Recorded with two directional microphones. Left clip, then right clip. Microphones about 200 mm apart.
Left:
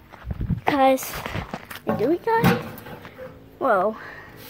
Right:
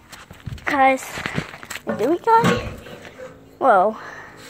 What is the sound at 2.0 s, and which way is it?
Speech, 5° right (ahead or behind).